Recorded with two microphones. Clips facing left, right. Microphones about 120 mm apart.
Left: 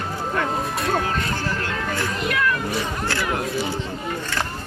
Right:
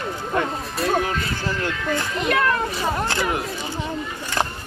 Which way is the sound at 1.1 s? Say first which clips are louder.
Left 1 dB; 45° left (ahead or behind).